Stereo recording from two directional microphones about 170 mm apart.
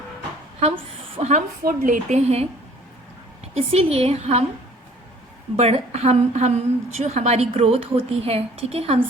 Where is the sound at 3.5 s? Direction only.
35° right (ahead or behind).